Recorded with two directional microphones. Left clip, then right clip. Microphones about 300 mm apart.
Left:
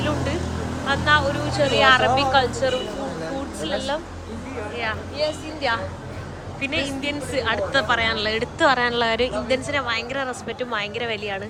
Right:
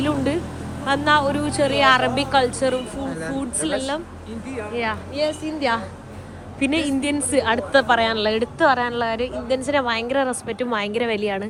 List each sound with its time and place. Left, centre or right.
0.9 s a woman's voice: centre